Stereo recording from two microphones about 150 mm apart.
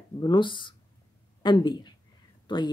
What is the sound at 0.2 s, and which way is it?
Speech, 30° left (ahead or behind).